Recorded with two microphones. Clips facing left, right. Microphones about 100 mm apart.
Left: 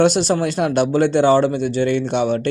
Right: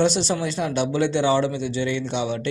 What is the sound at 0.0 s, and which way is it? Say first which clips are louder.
A man's voice: left 5 dB; 55° left (ahead or behind).